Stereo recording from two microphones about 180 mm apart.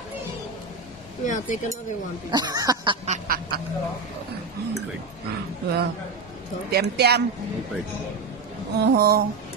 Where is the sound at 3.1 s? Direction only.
55° right (ahead or behind).